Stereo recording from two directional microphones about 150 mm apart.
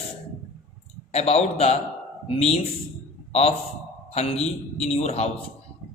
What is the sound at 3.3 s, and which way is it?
A man's voice, 45° left (ahead or behind).